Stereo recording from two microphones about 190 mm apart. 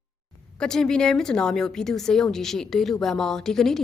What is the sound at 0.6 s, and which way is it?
Speech, 5° left (ahead or behind).